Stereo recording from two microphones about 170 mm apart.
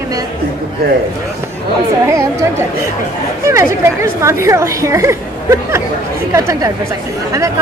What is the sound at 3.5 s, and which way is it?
A woman's voice, 15° right (ahead or behind).